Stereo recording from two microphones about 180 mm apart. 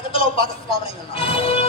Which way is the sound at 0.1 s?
30° left (ahead or behind).